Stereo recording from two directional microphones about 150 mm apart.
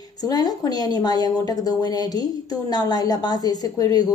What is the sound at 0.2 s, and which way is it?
A woman's voice, 25° left (ahead or behind).